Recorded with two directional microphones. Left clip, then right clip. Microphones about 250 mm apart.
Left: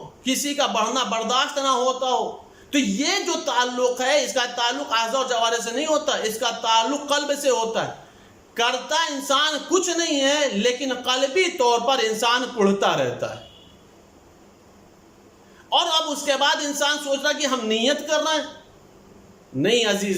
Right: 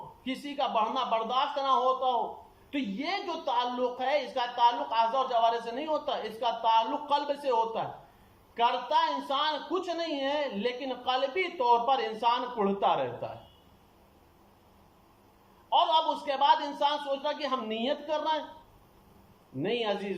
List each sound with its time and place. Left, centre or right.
0.3 s speech: left
15.7 s speech: left
19.6 s speech: left